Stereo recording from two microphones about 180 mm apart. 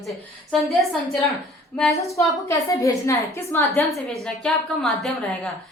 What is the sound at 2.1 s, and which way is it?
A woman's voice, 15° left (ahead or behind).